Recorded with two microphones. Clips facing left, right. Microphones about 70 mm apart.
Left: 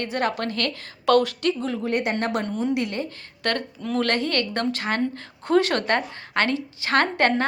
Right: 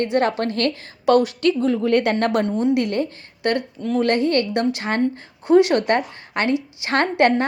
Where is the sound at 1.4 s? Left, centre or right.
Right.